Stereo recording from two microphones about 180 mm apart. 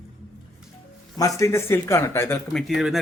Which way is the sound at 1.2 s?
20° left (ahead or behind).